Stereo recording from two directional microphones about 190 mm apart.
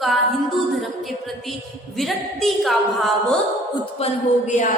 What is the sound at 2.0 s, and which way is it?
A woman's voice, centre (ahead or behind).